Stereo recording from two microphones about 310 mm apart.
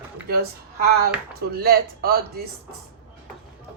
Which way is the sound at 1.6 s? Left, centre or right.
Right.